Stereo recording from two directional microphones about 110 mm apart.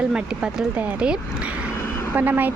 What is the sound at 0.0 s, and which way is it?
Speech, 5° right (ahead or behind).